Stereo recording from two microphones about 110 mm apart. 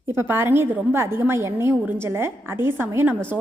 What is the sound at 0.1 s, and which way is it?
A woman's voice, 20° right (ahead or behind).